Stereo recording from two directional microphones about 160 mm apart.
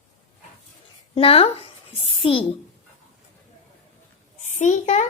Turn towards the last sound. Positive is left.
turn(degrees=45)  # may be behind; listen again after turning